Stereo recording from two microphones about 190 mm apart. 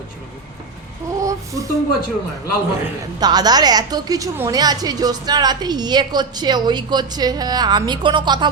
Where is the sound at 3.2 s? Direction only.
20° right (ahead or behind).